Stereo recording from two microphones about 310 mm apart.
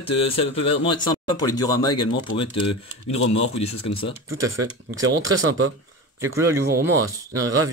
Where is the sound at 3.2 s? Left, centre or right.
Left.